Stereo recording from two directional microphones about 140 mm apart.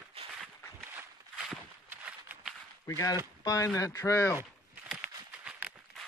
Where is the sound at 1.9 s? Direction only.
15° right (ahead or behind).